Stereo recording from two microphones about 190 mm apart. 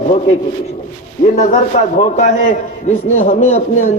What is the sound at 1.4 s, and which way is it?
A man's voice, 40° left (ahead or behind).